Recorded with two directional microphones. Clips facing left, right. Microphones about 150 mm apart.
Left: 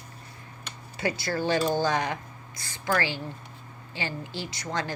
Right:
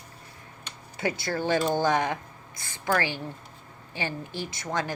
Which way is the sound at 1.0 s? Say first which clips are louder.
Even; 20° right (ahead or behind).